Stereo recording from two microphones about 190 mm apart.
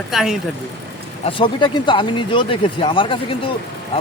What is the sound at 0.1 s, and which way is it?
Speech, centre (ahead or behind).